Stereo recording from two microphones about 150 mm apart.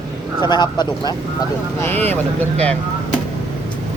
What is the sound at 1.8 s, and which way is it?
Speech, 15° left (ahead or behind).